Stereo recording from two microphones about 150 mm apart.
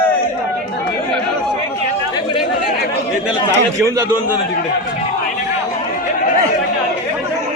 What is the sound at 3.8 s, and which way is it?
Speech, 15° right (ahead or behind).